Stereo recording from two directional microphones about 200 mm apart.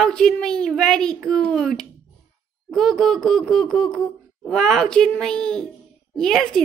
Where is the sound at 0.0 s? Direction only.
5° left (ahead or behind).